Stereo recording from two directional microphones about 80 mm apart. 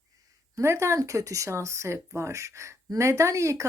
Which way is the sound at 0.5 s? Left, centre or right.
Right.